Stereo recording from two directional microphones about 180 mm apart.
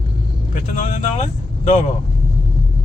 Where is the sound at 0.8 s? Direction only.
40° left (ahead or behind).